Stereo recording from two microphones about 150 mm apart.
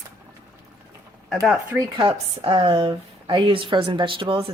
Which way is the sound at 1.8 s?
30° right (ahead or behind).